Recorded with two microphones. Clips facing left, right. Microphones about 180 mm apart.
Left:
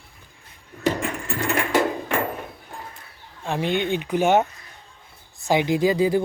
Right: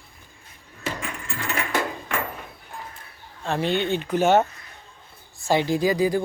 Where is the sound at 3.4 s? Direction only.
15° left (ahead or behind).